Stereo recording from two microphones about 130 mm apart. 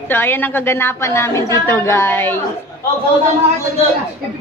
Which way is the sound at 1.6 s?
20° left (ahead or behind).